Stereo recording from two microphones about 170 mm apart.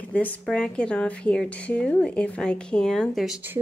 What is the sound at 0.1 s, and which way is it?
A woman's voice, 10° left (ahead or behind).